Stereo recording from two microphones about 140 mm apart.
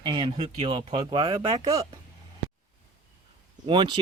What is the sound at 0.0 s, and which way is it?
Speech, 35° right (ahead or behind).